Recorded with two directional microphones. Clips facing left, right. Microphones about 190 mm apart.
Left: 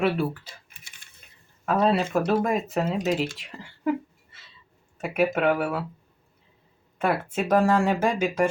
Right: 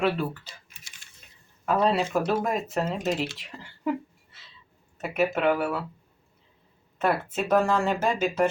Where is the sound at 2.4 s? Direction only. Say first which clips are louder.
Left 2 dB; 5° left (ahead or behind).